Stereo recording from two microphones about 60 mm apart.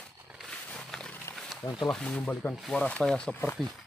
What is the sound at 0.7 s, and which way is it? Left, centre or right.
Wild animals, centre.